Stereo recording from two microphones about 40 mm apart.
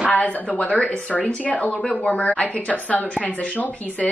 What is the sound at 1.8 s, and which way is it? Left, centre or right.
Speech, centre.